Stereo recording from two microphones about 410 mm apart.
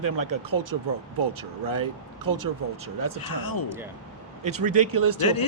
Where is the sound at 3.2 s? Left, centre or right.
Left.